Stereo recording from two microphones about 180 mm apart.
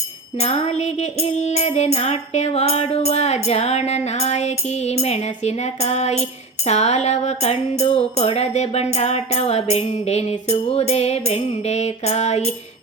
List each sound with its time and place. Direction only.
0.3 s music: 35° left (ahead or behind)